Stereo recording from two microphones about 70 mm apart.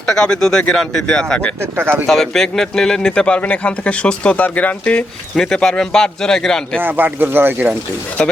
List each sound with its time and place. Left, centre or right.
0.1 s speech: centre
1.8 s speech: right
2.0 s speech: centre
5.4 s speech: centre
6.8 s speech: right